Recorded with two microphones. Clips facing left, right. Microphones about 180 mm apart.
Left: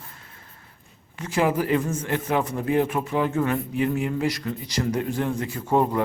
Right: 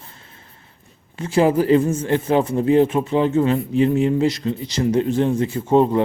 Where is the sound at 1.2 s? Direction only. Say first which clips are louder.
Right 6 dB; 30° right (ahead or behind).